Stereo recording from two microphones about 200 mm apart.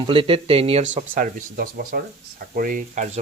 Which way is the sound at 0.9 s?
40° right (ahead or behind).